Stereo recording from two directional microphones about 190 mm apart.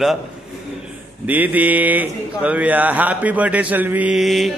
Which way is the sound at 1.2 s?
10° right (ahead or behind).